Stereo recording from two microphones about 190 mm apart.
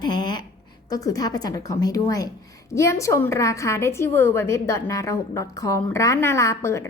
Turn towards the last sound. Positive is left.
turn(degrees=15)  # may be behind; listen again after turning